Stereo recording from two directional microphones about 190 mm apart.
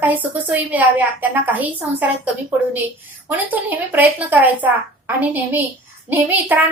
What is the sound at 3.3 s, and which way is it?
A woman's voice, 10° right (ahead or behind).